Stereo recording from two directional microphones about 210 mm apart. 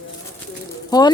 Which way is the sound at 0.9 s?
20° left (ahead or behind).